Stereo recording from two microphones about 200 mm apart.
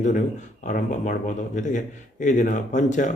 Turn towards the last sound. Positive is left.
turn(degrees=40)  # may be behind; listen again after turning